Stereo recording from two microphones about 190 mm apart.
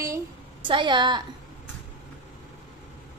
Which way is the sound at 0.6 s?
25° right (ahead or behind).